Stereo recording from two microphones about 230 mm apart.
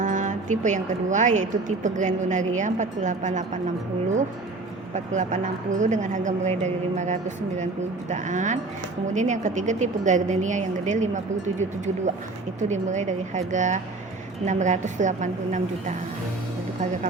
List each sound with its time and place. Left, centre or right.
0.0 s a woman's voice: right
4.9 s a woman's voice: right
12.5 s a woman's voice: right